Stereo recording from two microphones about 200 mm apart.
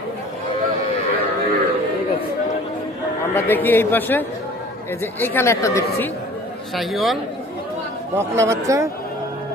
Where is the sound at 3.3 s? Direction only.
10° left (ahead or behind).